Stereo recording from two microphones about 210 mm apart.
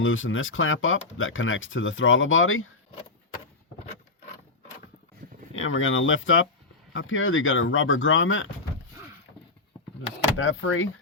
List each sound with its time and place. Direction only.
0.0 s speech: 70° left (ahead or behind)
5.5 s speech: 70° left (ahead or behind)
10.3 s speech: 70° left (ahead or behind)